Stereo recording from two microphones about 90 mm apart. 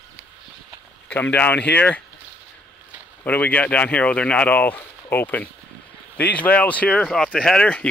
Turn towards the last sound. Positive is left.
turn(degrees=10)  # may be behind; listen again after turning